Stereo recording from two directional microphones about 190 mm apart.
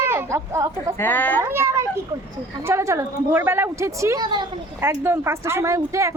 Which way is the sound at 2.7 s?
15° right (ahead or behind).